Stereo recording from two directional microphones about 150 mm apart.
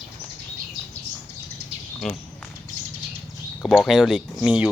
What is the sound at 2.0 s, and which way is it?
Speech, centre (ahead or behind).